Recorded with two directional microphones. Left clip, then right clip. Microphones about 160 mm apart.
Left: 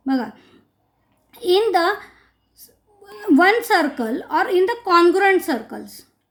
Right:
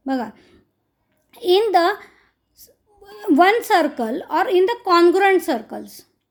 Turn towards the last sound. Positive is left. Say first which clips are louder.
# right 1 dB
turn(degrees=-45)  # may be behind; listen again after turning